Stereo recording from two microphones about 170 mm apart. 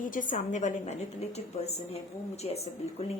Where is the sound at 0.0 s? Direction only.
50° left (ahead or behind).